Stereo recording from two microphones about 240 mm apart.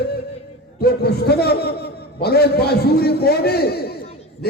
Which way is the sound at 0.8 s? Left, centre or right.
Left.